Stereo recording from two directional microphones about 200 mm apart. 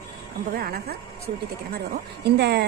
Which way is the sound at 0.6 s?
50° right (ahead or behind).